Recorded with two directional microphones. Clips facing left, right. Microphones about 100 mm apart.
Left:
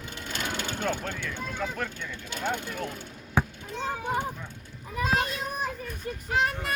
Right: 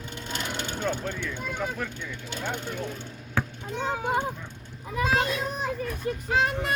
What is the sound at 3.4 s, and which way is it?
Chop, 15° left (ahead or behind).